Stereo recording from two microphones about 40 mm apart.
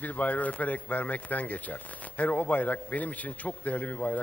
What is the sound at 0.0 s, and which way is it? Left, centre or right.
Speech, left.